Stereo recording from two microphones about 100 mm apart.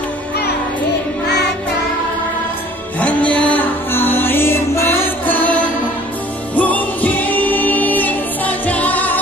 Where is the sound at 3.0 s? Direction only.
15° left (ahead or behind).